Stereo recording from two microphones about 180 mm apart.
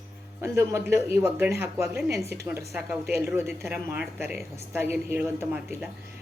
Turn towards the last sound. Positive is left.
turn(degrees=-10)  # may be behind; listen again after turning